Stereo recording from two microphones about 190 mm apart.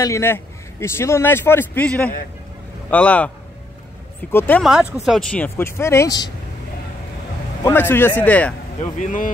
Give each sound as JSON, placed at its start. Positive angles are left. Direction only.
{"t": 0.0, "sound": "a man's voice", "side_deg": 15}
{"t": 4.3, "sound": "a man's voice", "side_deg": 10}
{"t": 7.6, "sound": "a man's voice", "side_deg": 10}
{"t": 9.0, "sound": "speech", "side_deg": 45}